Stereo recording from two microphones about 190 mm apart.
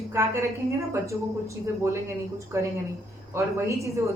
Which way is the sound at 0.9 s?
15° right (ahead or behind).